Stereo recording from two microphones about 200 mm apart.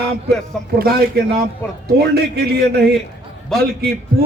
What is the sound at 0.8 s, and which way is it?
A man's voice, 50° right (ahead or behind).